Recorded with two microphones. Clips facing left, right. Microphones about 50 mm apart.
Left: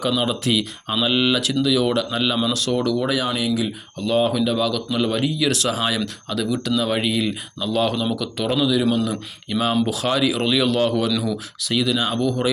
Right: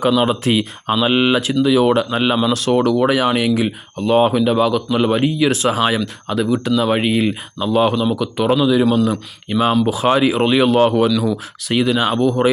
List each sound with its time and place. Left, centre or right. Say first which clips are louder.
0.2 s speech: right 5 dB; right
3.9 s a man's voice: right 5 dB; right; by 10.1 s centre
10.1 s speech: right 7 dB; right